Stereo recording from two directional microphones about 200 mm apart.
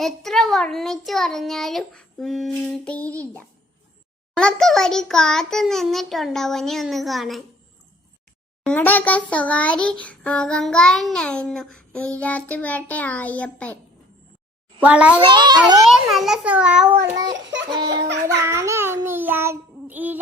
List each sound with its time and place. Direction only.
0.0 s a child's voice: centre (ahead or behind)
8.6 s child singing: 5° left (ahead or behind)
14.8 s child singing: 5° right (ahead or behind)
15.3 s a child's voice: 20° right (ahead or behind)
15.8 s a child's voice: centre (ahead or behind)
17.0 s child singing: 20° right (ahead or behind)
17.3 s a sound: 70° right (ahead or behind)
17.7 s a child's voice: 20° right (ahead or behind)
18.4 s child singing: 15° right (ahead or behind)